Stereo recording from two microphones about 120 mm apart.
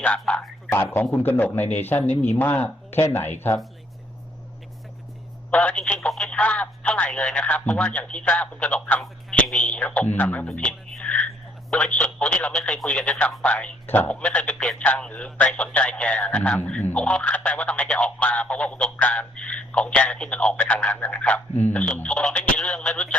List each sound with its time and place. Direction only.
0.0 s speech: 10° left (ahead or behind)
5.5 s speech: 10° left (ahead or behind)
10.5 s a sound: 10° left (ahead or behind)
11.7 s speech: 10° left (ahead or behind)